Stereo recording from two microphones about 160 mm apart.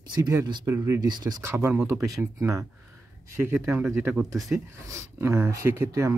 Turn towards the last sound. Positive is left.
turn(degrees=-15)  # may be behind; listen again after turning